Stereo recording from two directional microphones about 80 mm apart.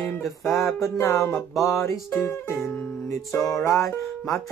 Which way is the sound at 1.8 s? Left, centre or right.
Left.